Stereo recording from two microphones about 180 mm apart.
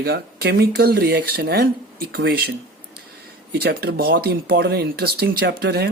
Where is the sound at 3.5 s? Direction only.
65° right (ahead or behind).